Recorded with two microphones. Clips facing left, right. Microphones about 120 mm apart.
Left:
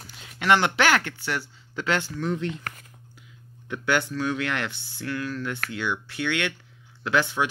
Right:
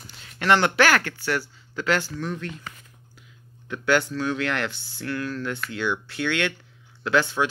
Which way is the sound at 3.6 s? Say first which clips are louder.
Right 3 dB; 15° left (ahead or behind).